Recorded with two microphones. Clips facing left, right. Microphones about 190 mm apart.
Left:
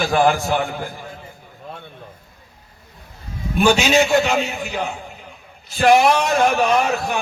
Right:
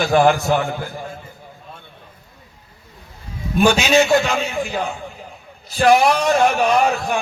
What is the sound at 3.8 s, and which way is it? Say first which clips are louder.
Speech: right 1 dB; 40° right (ahead or behind).